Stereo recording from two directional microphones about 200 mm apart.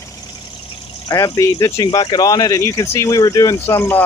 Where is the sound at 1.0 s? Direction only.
15° left (ahead or behind).